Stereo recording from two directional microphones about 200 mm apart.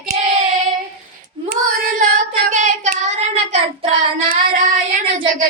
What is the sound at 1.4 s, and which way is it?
Child singing, 45° right (ahead or behind).